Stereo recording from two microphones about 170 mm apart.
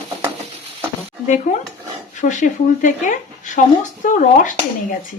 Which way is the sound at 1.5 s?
40° left (ahead or behind).